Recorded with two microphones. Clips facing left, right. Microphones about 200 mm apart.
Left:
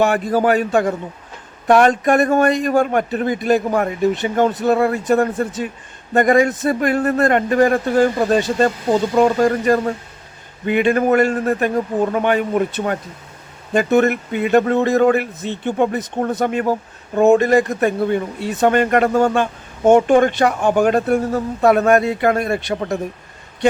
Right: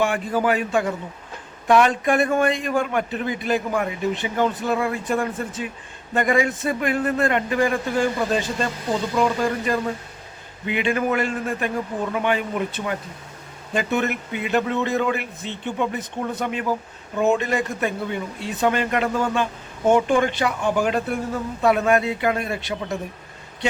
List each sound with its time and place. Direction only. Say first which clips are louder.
0.0 s speech: left 5 dB; 40° left (ahead or behind)